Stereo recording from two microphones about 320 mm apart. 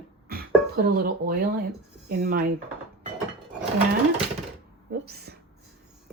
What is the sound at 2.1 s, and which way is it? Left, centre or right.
Speech, right.